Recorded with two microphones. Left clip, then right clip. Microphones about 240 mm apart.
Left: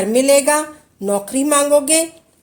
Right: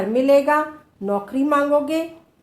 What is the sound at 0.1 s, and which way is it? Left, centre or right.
A woman's voice, left.